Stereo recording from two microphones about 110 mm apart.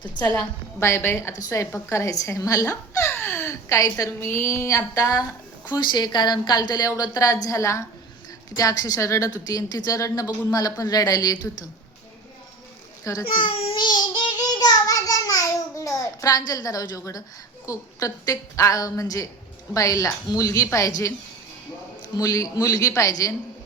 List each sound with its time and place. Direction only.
0.0 s a woman's voice: 15° left (ahead or behind); by 5.2 s 30° left (ahead or behind)
5.6 s a woman's voice: 40° left (ahead or behind)
13.2 s a child's voice: 50° left (ahead or behind); by 21.1 s 30° left (ahead or behind)
22.2 s a woman's voice: 30° left (ahead or behind)